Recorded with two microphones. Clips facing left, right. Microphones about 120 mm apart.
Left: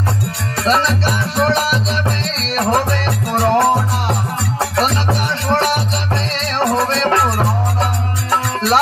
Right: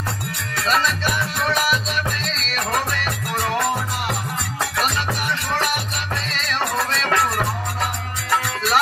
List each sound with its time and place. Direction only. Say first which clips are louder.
0.7 s music: left 5 dB; 30° left (ahead or behind)